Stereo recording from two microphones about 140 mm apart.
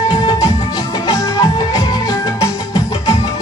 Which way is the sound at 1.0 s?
25° left (ahead or behind).